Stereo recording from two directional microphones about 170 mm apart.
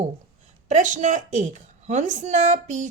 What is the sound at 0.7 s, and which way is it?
A woman's voice, 45° right (ahead or behind).